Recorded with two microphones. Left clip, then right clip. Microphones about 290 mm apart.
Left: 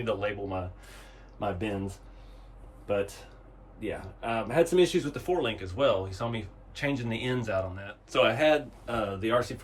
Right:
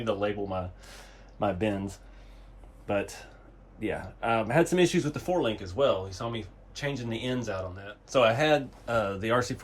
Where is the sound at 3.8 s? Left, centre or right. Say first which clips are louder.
Right 4 dB; right; by 8.0 s centre.